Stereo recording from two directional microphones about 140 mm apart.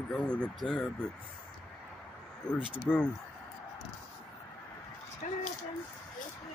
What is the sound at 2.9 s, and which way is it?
Speech, 5° left (ahead or behind).